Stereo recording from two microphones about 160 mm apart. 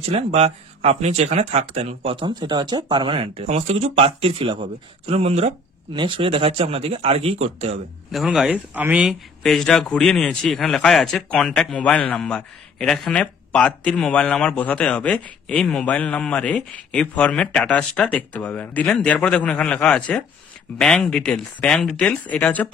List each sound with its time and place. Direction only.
0.0 s speech: 40° right (ahead or behind)
8.1 s speech: centre (ahead or behind)